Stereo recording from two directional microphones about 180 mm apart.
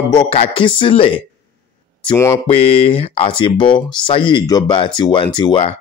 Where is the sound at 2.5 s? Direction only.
35° left (ahead or behind).